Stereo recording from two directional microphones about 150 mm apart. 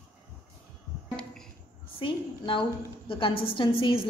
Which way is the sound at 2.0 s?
35° left (ahead or behind).